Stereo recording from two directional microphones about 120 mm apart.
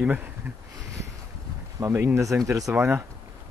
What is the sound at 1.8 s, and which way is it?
Speech, 20° right (ahead or behind).